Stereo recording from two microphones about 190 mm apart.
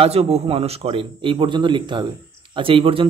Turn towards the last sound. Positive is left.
turn(degrees=-30)  # may be behind; listen again after turning